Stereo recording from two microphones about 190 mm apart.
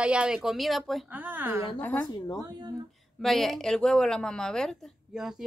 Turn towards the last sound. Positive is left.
turn(degrees=0)  # may be behind; listen again after turning